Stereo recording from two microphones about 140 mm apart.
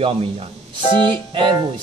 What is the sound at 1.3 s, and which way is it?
Speech, 35° right (ahead or behind).